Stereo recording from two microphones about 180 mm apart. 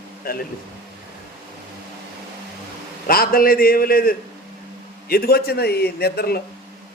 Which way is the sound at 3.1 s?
55° left (ahead or behind).